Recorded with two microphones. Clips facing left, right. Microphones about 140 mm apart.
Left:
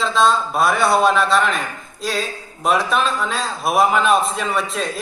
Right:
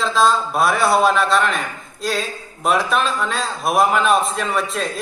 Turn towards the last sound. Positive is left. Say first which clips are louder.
# even
turn(degrees=0)  # may be behind; listen again after turning